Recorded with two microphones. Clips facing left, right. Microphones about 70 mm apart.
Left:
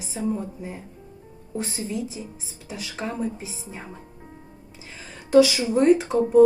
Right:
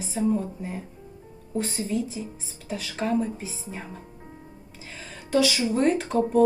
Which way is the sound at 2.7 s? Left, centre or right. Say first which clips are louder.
Right 5 dB; centre.